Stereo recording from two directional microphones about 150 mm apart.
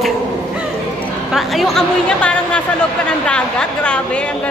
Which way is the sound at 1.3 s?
Centre (ahead or behind).